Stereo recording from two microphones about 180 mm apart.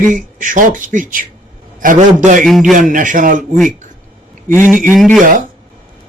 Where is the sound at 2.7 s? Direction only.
45° right (ahead or behind).